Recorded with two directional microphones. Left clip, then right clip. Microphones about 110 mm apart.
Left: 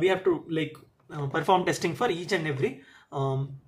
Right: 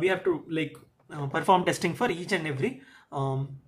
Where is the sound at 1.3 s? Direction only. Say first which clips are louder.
Right 1 dB; 20° right (ahead or behind).